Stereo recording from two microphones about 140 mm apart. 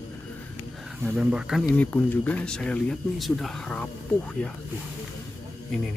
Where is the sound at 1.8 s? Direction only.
10° left (ahead or behind).